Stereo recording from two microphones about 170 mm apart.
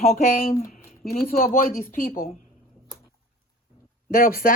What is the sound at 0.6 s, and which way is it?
Speech, 55° left (ahead or behind).